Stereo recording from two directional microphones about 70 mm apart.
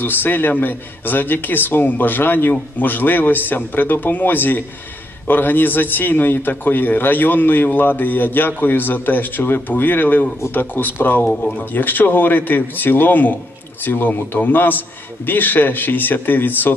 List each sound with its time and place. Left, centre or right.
0.0 s a man's voice: left